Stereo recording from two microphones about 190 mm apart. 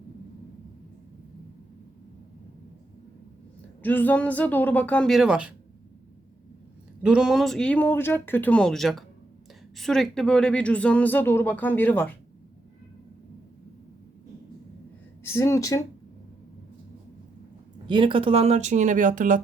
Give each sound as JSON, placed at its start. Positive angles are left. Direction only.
{"t": 3.8, "sound": "speech", "side_deg": 10}
{"t": 7.0, "sound": "speech", "side_deg": -5}
{"t": 15.2, "sound": "speech", "side_deg": 15}
{"t": 17.8, "sound": "speech", "side_deg": -25}